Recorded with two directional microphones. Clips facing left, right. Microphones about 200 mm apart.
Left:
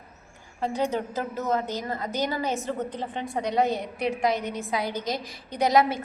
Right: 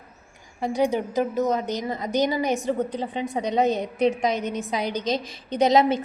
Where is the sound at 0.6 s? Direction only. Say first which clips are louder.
Right 4 dB; 15° right (ahead or behind).